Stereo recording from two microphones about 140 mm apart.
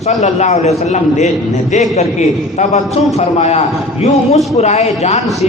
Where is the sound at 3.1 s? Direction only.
50° left (ahead or behind).